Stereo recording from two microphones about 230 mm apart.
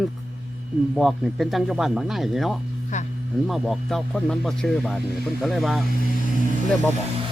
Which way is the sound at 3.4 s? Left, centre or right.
Centre.